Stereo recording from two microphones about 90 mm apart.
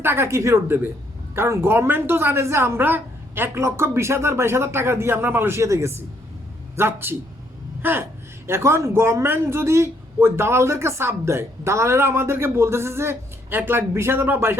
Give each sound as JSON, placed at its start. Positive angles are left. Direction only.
{"t": 0.0, "sound": "a woman's voice", "side_deg": -25}
{"t": 7.8, "sound": "gasp", "side_deg": -20}
{"t": 8.4, "sound": "a woman's voice", "side_deg": -30}